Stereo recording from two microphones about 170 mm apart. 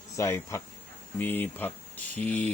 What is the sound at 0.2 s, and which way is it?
Speech, 15° left (ahead or behind).